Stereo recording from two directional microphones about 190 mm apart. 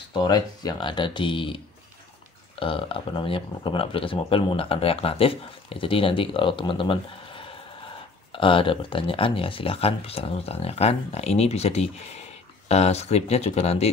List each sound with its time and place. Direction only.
0.1 s speech: 20° left (ahead or behind)
2.6 s speech: 30° left (ahead or behind)